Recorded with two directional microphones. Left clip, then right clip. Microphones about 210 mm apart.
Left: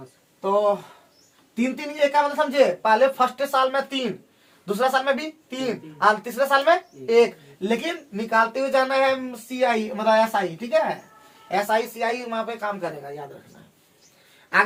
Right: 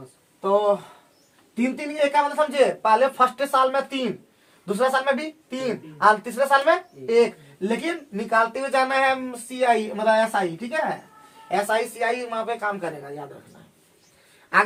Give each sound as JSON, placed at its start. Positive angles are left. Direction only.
{"t": 0.4, "sound": "speech", "side_deg": -15}
{"t": 11.4, "sound": "speech", "side_deg": -15}